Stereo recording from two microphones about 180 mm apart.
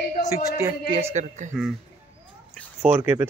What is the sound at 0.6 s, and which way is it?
Speech, 20° right (ahead or behind).